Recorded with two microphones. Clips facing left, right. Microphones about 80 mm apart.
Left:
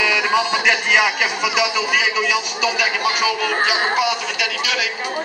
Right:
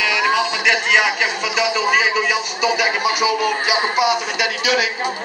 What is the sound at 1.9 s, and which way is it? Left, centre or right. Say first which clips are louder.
Speech: right 2 dB; right.